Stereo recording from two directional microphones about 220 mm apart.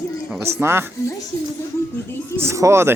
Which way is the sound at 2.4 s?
15° right (ahead or behind).